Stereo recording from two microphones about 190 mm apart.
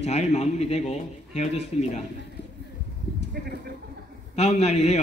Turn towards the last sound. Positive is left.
turn(degrees=35)  # may be behind; listen again after turning